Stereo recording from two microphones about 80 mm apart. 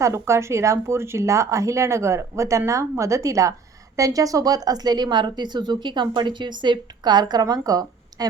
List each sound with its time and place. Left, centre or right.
0.0 s a woman's voice: right